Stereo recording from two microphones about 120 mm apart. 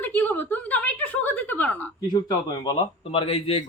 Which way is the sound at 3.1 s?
50° left (ahead or behind).